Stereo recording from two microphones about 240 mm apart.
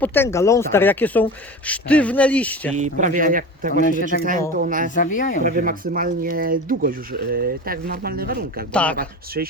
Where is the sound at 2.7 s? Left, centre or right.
Right.